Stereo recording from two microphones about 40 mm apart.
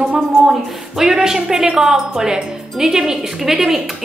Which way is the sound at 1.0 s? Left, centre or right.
Centre.